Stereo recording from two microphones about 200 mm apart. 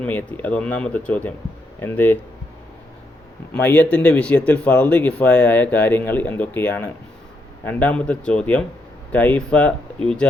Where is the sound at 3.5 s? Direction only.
5° left (ahead or behind).